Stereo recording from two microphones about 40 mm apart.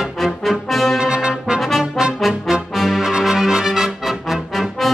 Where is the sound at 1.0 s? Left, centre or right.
Right.